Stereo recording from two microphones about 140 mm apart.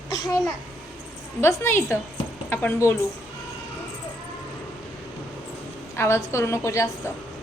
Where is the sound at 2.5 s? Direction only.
15° left (ahead or behind).